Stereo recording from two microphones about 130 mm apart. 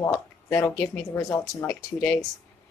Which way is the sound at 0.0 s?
20° left (ahead or behind).